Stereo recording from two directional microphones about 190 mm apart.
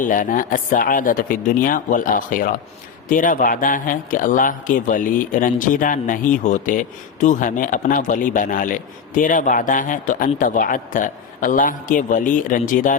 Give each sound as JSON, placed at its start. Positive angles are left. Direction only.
{"t": 0.0, "sound": "a man's voice", "side_deg": 45}